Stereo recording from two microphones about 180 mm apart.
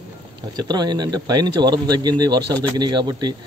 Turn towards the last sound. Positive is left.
turn(degrees=-25)  # may be behind; listen again after turning